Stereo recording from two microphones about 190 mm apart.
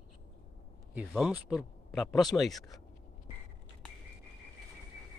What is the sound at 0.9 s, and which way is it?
Speech, 5° right (ahead or behind).